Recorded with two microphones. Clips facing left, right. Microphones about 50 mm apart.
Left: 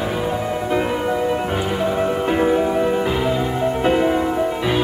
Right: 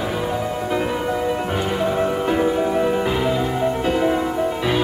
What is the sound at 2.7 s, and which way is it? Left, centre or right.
Music, centre.